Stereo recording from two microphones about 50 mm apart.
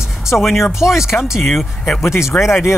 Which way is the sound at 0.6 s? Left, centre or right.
Left.